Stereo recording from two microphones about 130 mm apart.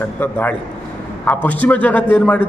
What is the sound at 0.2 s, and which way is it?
A man's voice, 15° left (ahead or behind).